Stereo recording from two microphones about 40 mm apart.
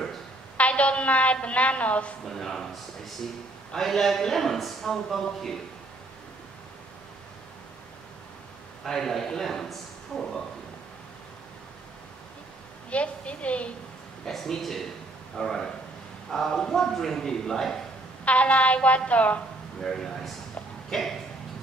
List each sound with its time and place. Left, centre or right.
0.6 s a woman's voice: left
2.2 s a man's voice: centre
8.8 s a man's voice: centre
12.9 s a woman's voice: left
14.3 s a man's voice: centre
18.2 s a woman's voice: left
19.8 s a man's voice: centre